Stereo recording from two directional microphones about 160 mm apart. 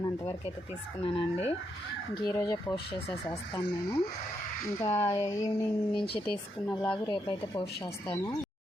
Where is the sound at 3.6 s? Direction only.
30° left (ahead or behind).